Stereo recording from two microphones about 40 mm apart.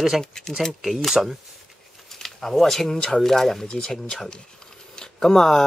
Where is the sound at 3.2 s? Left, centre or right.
Centre.